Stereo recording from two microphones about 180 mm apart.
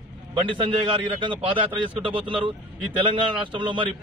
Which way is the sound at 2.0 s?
30° right (ahead or behind).